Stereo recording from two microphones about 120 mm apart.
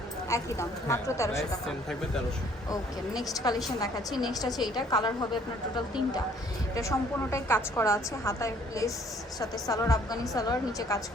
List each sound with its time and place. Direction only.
0.3 s a woman's voice: 25° left (ahead or behind)
1.4 s speech: 5° left (ahead or behind)
3.3 s a woman's voice: 30° left (ahead or behind)
6.7 s a woman's voice: 25° left (ahead or behind)